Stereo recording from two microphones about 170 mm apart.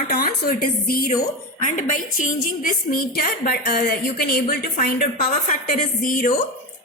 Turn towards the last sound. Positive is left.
turn(degrees=50)  # may be behind; listen again after turning